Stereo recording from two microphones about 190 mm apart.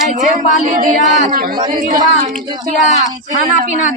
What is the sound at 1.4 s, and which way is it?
Female singing, 50° right (ahead or behind).